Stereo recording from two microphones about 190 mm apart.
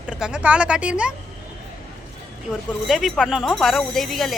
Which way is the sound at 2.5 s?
Centre (ahead or behind).